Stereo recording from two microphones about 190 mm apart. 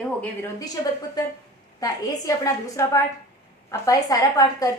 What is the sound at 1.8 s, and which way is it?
A woman's voice, 20° left (ahead or behind).